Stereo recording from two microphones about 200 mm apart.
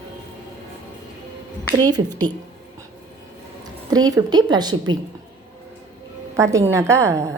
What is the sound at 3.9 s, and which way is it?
A woman's voice, 20° right (ahead or behind).